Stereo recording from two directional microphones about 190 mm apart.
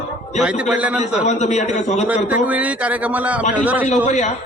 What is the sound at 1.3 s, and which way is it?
Speech, 35° left (ahead or behind).